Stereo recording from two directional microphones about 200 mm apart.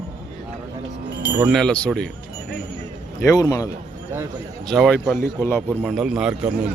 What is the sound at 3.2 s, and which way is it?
Speech, 15° left (ahead or behind).